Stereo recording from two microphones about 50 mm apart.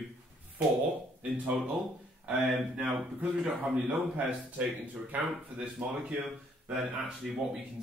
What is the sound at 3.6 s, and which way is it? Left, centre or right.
Speech, right.